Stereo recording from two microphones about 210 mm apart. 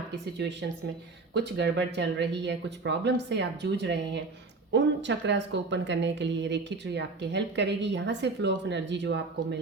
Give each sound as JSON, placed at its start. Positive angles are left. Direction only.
{"t": 0.1, "sound": "speech", "side_deg": -55}